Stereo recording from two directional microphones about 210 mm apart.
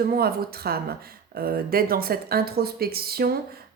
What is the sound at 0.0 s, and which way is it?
Speech, 45° right (ahead or behind).